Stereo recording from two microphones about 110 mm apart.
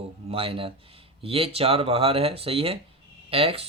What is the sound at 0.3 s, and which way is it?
Speech, 60° right (ahead or behind).